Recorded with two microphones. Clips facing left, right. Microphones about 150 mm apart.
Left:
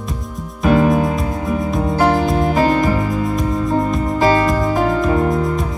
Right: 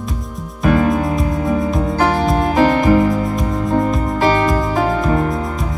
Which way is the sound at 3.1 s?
Centre (ahead or behind).